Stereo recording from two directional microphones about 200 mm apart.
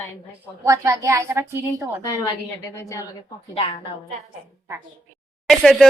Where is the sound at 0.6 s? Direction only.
15° right (ahead or behind).